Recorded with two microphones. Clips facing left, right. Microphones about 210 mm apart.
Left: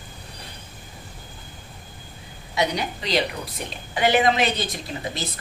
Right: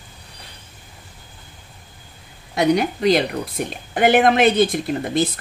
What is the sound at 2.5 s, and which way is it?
A woman's voice, 55° right (ahead or behind).